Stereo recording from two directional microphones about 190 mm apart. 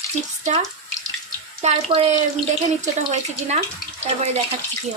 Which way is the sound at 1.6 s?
30° right (ahead or behind).